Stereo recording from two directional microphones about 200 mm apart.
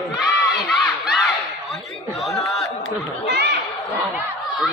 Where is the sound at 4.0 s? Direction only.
10° right (ahead or behind).